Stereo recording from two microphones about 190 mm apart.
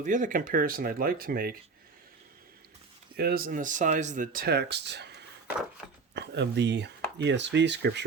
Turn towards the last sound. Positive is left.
turn(degrees=-65)  # may be behind; listen again after turning